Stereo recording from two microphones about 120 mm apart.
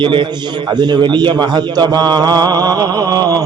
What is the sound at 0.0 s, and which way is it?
A man's voice, 40° right (ahead or behind).